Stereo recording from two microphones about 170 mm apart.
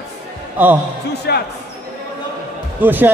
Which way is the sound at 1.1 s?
70° left (ahead or behind).